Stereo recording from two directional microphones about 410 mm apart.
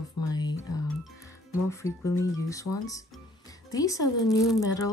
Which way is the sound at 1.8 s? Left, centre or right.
Centre.